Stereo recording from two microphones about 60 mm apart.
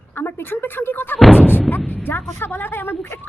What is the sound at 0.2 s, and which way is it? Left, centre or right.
A woman's voice, left.